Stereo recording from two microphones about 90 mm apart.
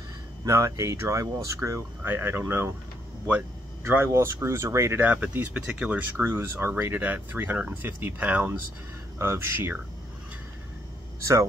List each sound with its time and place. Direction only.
0.5 s speech: 35° right (ahead or behind)
3.8 s speech: 30° right (ahead or behind)